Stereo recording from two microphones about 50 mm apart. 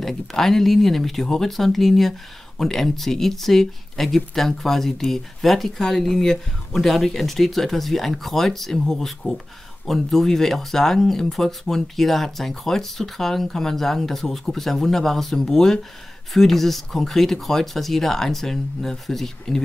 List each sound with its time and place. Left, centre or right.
0.0 s speech: centre